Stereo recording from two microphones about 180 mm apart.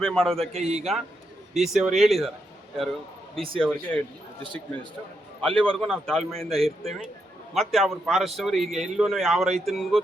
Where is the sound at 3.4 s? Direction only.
5° left (ahead or behind).